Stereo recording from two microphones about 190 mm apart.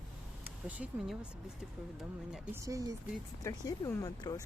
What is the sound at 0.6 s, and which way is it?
Speech, 5° right (ahead or behind).